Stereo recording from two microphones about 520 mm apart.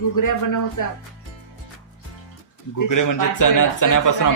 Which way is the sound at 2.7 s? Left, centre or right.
Left.